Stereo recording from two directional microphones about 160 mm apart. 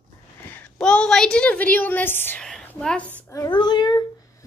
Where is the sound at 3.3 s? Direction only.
25° left (ahead or behind).